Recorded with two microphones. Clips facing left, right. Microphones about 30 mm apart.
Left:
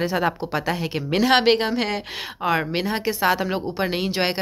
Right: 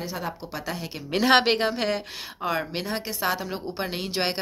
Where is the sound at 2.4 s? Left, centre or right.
Left.